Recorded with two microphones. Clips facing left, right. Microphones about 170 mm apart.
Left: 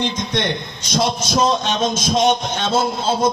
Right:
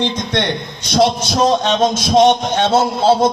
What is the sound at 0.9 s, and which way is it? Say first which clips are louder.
A man's voice: right 6 dB; 65° right (ahead or behind).